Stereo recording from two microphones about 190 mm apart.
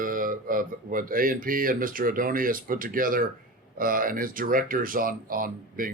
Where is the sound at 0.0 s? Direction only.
45° right (ahead or behind).